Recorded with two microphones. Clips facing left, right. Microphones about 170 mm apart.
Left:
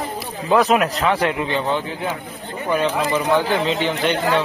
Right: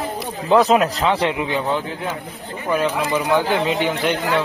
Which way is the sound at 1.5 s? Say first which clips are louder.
Even; centre (ahead or behind).